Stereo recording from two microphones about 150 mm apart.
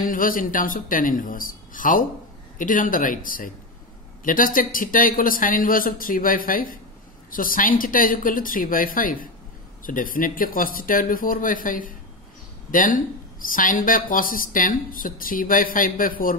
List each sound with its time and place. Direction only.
0.0 s speech: 65° left (ahead or behind)